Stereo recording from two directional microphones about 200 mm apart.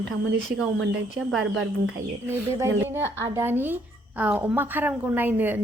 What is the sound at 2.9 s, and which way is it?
A woman's voice, 15° right (ahead or behind).